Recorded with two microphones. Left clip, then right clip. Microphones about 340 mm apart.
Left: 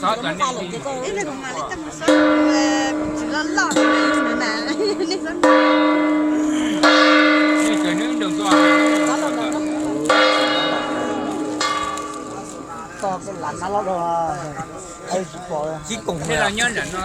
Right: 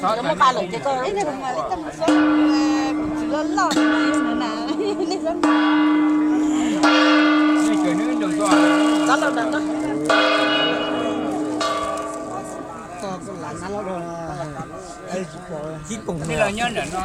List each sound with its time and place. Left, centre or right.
0.3 s speech: right
1.5 s speech: centre
2.0 s music: centre
2.5 s speech: centre
3.8 s music: centre
6.5 s church bell: centre
6.8 s church bell: centre
10.1 s church bell: centre
16.4 s music: centre